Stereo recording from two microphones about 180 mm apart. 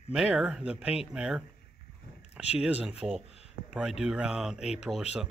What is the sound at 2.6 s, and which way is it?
Speech, 5° right (ahead or behind).